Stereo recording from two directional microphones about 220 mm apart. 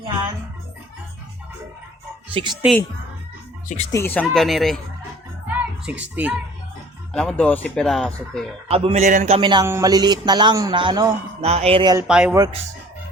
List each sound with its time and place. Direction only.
2.3 s a man's voice: 20° right (ahead or behind)
3.9 s speech: 10° left (ahead or behind)
5.5 s music: 5° right (ahead or behind)
7.1 s speech: 5° left (ahead or behind)
8.7 s a man's voice: 25° right (ahead or behind)
12.0 s speech: 5° right (ahead or behind)